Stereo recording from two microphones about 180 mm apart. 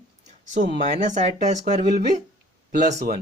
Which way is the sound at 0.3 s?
40° right (ahead or behind).